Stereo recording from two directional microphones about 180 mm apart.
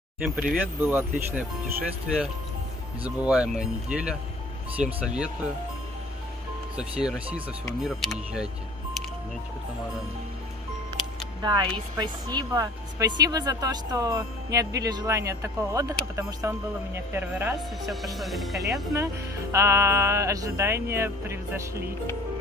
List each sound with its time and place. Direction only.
0.2 s speech: 10° right (ahead or behind)
7.8 s speech: 5° right (ahead or behind)
11.4 s speech: 25° right (ahead or behind)
17.8 s speech: centre (ahead or behind)
19.5 s speech: 15° right (ahead or behind)